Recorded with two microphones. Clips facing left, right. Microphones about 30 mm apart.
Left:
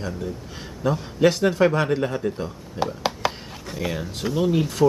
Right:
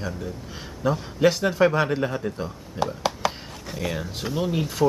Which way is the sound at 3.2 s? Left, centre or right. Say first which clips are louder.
Left 1 dB; centre.